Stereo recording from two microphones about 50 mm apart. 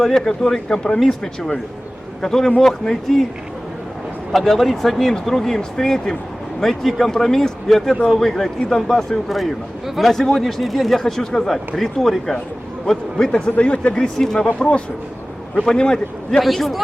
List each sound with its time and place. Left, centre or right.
0.0 s speech: centre
4.3 s speech: centre
16.4 s speech: centre